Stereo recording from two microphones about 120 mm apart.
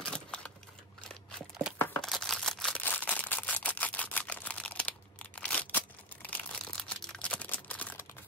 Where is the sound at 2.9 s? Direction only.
15° left (ahead or behind).